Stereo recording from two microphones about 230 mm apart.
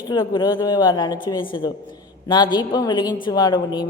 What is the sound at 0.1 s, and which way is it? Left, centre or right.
A man's voice, centre.